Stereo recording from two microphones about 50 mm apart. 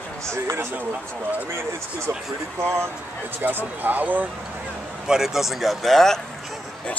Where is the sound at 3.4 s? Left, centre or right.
Right.